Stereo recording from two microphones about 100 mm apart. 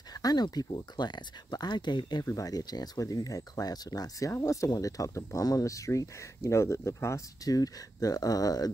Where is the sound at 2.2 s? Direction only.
35° left (ahead or behind).